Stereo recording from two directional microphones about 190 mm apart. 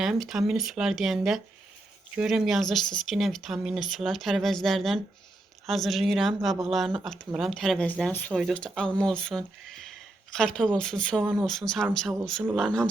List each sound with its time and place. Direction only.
0.0 s speech: centre (ahead or behind)